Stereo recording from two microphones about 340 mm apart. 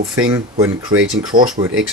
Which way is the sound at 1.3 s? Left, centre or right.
Right.